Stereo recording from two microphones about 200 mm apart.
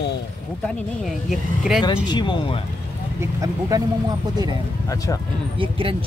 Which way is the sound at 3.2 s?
15° right (ahead or behind).